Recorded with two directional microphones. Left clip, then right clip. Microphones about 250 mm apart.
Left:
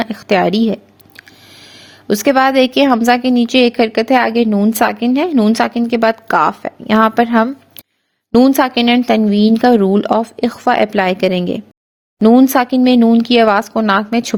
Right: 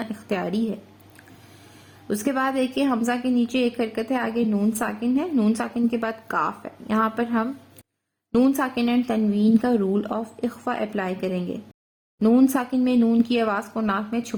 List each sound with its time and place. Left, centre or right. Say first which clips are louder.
0.0 s a woman's voice: left 14 dB; left